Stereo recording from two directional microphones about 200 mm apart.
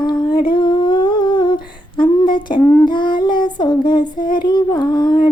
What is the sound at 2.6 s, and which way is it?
Child singing, 15° left (ahead or behind).